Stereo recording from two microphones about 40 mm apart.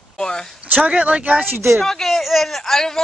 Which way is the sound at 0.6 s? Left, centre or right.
Right.